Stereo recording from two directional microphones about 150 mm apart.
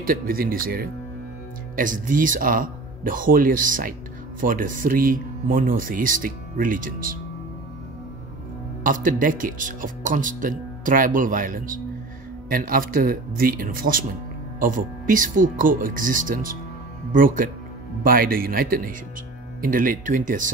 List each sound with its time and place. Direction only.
0.0 s speech: 75° right (ahead or behind)
1.8 s speech: 65° right (ahead or behind)
8.8 s speech: 65° right (ahead or behind)
18.0 s speech: 75° right (ahead or behind)